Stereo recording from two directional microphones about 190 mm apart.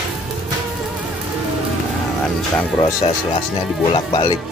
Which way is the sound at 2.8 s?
25° left (ahead or behind).